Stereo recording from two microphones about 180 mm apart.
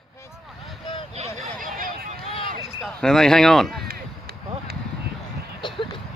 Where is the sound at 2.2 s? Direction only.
30° left (ahead or behind).